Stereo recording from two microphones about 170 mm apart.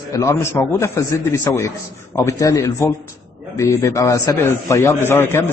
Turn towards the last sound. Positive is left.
turn(degrees=15)  # may be behind; listen again after turning